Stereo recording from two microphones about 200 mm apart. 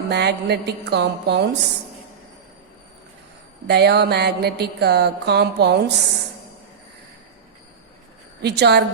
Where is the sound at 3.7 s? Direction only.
55° right (ahead or behind).